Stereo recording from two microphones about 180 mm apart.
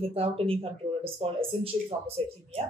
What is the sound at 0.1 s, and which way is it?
Speech, 30° right (ahead or behind).